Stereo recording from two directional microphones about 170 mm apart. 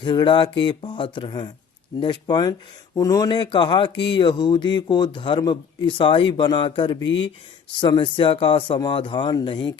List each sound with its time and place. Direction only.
0.0 s a man's voice: 30° left (ahead or behind)